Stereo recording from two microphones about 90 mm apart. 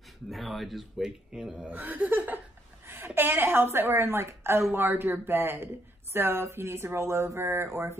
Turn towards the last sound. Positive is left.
turn(degrees=-30)  # may be behind; listen again after turning